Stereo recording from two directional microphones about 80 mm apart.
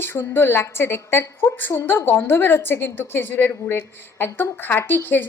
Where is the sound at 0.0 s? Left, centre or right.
Left.